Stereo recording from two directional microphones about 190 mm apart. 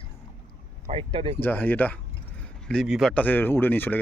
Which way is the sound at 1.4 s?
10° left (ahead or behind).